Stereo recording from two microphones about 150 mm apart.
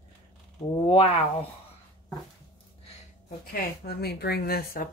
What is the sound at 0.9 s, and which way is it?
Speech, 45° left (ahead or behind).